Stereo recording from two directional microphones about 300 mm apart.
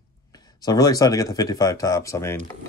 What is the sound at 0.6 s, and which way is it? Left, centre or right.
Speech, centre.